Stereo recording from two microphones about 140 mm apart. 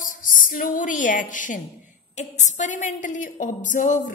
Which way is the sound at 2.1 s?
60° left (ahead or behind).